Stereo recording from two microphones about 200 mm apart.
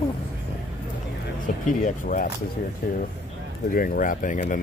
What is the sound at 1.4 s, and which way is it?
Speech, 40° left (ahead or behind).